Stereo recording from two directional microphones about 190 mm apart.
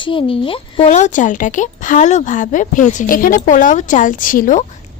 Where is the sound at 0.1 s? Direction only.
25° left (ahead or behind).